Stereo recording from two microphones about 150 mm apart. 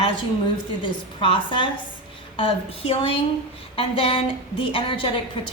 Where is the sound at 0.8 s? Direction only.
35° left (ahead or behind).